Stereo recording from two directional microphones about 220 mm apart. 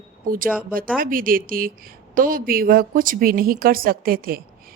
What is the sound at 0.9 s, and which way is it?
A woman's voice, 40° right (ahead or behind).